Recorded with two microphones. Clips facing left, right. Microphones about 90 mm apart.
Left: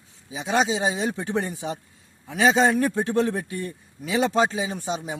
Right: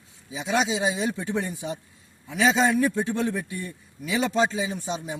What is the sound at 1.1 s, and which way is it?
Speech, 85° left.